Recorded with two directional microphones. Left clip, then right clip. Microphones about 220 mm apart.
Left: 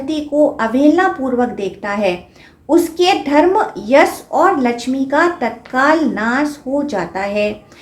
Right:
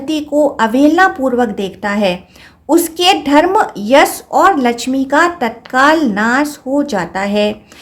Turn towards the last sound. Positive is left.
turn(degrees=-45)  # may be behind; listen again after turning